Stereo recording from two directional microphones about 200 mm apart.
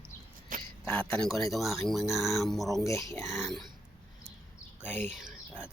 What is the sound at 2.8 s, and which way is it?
Speech, 15° left (ahead or behind).